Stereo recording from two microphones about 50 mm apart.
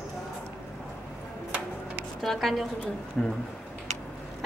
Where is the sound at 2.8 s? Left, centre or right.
Left.